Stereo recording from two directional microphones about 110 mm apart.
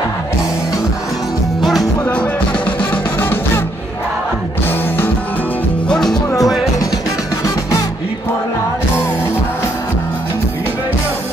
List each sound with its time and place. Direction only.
1.6 s music: centre (ahead or behind)
2.0 s music: 10° left (ahead or behind)
4.6 s music: 20° left (ahead or behind)
5.9 s music: 5° left (ahead or behind)